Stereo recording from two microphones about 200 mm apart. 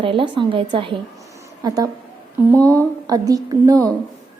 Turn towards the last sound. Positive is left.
turn(degrees=-15)  # may be behind; listen again after turning